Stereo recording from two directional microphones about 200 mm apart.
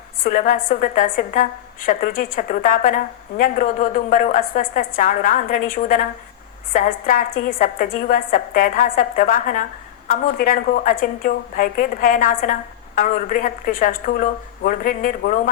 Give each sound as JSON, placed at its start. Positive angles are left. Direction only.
{"t": 0.2, "sound": "a woman's voice", "side_deg": 40}